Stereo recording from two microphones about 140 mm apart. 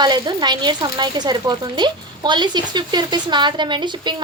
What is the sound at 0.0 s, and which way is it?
A woman's voice, 30° right (ahead or behind).